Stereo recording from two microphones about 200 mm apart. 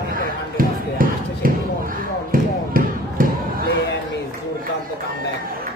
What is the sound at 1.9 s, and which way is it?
Basketball bounce, 45° right (ahead or behind).